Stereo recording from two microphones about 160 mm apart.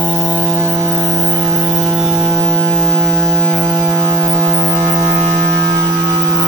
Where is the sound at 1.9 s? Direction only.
5° right (ahead or behind).